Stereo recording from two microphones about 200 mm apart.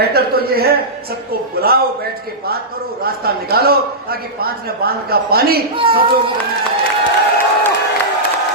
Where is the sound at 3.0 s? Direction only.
50° right (ahead or behind).